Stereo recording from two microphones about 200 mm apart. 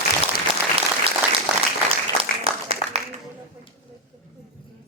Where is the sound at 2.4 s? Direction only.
30° right (ahead or behind).